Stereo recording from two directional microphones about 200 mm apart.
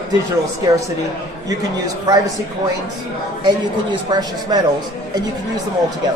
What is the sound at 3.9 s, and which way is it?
Speech, 20° right (ahead or behind).